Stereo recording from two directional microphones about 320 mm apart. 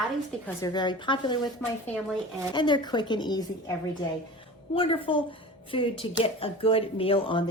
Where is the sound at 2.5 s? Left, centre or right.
Centre.